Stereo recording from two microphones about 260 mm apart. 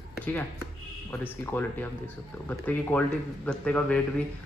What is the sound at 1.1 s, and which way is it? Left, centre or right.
A man's voice, centre.